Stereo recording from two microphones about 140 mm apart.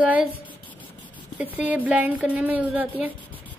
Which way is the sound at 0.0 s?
10° right (ahead or behind).